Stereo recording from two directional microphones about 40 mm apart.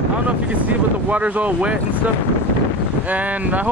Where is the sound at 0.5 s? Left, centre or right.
Right.